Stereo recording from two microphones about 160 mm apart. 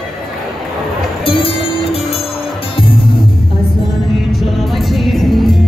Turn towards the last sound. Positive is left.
turn(degrees=0)  # may be behind; listen again after turning